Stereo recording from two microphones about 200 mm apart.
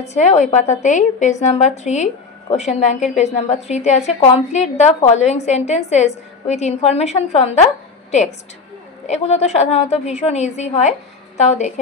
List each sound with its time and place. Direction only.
0.0 s a woman's voice: 35° left (ahead or behind)